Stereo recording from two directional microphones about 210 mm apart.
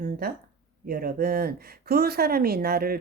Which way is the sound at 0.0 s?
45° right (ahead or behind).